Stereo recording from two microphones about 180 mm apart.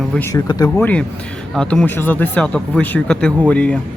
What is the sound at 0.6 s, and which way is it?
Speech, 10° left (ahead or behind).